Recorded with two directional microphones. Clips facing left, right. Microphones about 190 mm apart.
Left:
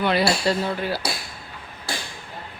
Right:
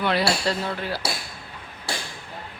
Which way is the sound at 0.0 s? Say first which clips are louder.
Left 2 dB; centre (ahead or behind).